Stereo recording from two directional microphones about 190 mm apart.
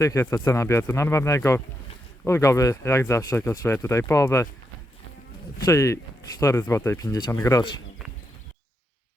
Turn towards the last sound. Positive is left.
turn(degrees=20)  # may be behind; listen again after turning